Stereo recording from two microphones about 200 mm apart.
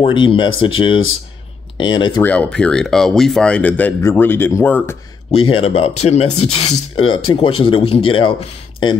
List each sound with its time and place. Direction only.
0.0 s speech: 25° left (ahead or behind)
2.2 s speech: 5° left (ahead or behind)
5.3 s speech: 90° left
5.6 s speech: 30° left (ahead or behind)
6.6 s speech: 90° left
7.3 s speech: 25° left (ahead or behind)